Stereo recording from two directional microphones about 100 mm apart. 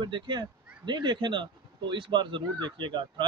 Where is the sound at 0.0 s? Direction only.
50° right (ahead or behind).